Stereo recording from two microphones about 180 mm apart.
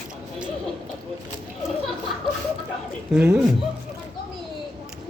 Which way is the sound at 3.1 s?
5° right (ahead or behind).